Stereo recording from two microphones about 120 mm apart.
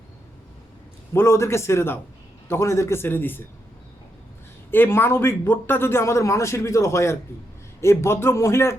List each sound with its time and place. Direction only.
1.1 s a man's voice: 20° left (ahead or behind)
4.7 s a man's voice: 20° left (ahead or behind)